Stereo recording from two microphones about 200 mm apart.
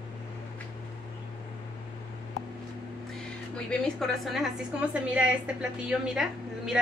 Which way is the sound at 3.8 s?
Centre (ahead or behind).